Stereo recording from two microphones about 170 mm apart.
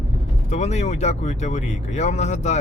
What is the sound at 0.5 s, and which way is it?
Speech, 40° left (ahead or behind).